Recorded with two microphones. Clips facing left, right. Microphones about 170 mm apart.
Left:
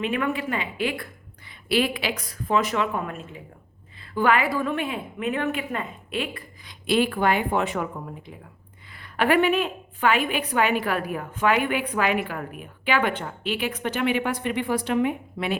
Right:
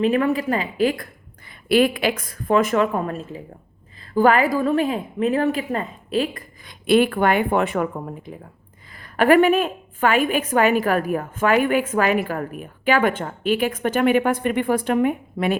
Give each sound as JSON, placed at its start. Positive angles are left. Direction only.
{"t": 0.0, "sound": "a woman's voice", "side_deg": -35}
{"t": 1.5, "sound": "a woman's voice", "side_deg": -50}
{"t": 9.0, "sound": "a woman's voice", "side_deg": -45}